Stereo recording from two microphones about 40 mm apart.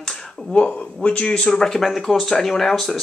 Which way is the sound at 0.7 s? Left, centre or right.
Left.